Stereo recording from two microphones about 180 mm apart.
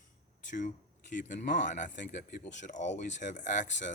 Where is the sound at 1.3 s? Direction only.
45° left (ahead or behind).